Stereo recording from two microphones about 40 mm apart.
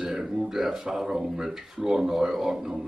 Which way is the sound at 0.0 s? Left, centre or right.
Centre.